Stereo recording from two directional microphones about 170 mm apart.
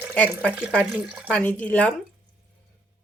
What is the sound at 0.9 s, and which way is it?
Speech, 10° right (ahead or behind).